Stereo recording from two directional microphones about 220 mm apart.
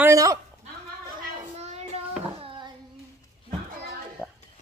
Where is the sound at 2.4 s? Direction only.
25° right (ahead or behind).